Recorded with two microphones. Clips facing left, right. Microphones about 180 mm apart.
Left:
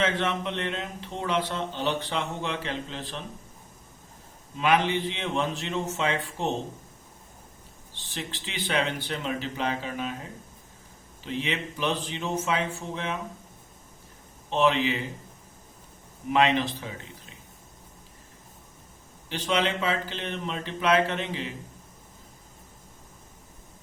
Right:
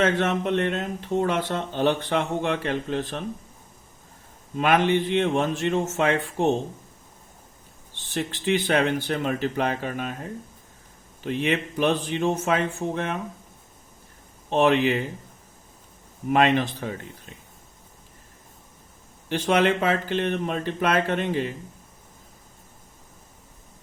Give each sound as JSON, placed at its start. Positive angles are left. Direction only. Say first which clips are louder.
{"t": 0.0, "sound": "speech", "louder": "right 5 dB", "side_deg": -50}
{"t": 4.5, "sound": "a man's voice", "louder": "right 4 dB", "side_deg": -50}
{"t": 8.1, "sound": "speech", "louder": "right 12 dB", "side_deg": -50}
{"t": 11.3, "sound": "a man's voice", "louder": "right 6 dB", "side_deg": -55}
{"t": 14.5, "sound": "a man's voice", "louder": "right 4 dB", "side_deg": -55}
{"t": 16.3, "sound": "speech", "louder": "right 3 dB", "side_deg": -50}
{"t": 19.3, "sound": "speech", "louder": "right 6 dB", "side_deg": -50}